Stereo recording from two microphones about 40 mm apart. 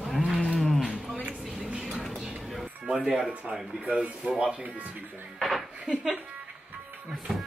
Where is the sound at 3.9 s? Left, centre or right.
Right.